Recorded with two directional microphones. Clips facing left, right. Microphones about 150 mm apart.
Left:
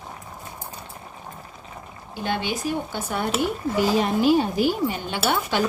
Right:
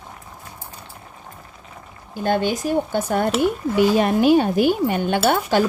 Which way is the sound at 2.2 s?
45° right (ahead or behind).